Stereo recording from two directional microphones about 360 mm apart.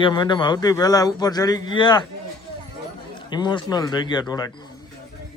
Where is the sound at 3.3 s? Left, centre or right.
Centre.